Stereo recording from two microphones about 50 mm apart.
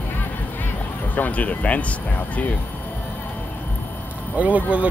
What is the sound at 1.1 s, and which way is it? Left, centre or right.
Speech, left.